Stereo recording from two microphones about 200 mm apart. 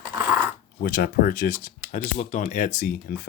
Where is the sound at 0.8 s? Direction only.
50° left (ahead or behind).